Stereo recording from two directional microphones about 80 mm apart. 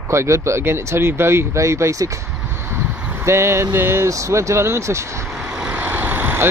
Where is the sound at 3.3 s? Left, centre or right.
Right.